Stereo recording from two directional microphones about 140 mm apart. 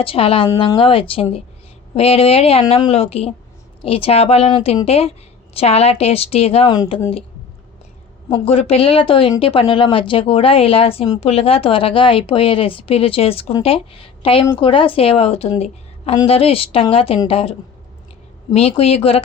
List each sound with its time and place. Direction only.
0.0 s speech: 40° left (ahead or behind)
6.7 s speech: 35° left (ahead or behind)
8.4 s speech: 45° left (ahead or behind)
18.7 s speech: 45° left (ahead or behind)